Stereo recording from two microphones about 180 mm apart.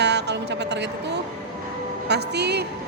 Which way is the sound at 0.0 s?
70° right (ahead or behind).